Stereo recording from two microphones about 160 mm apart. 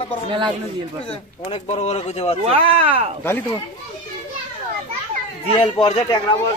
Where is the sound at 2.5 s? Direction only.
35° right (ahead or behind).